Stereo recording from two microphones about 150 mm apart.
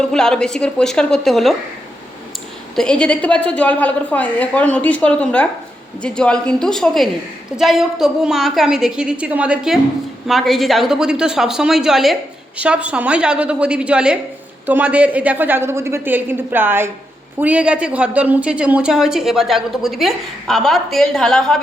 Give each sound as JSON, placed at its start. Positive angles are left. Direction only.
{"t": 0.0, "sound": "a woman's voice", "side_deg": 5}
{"t": 2.7, "sound": "a woman's voice", "side_deg": 5}